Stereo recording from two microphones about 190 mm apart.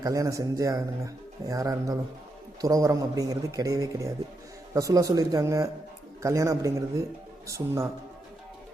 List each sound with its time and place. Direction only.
0.0 s speech: 20° right (ahead or behind)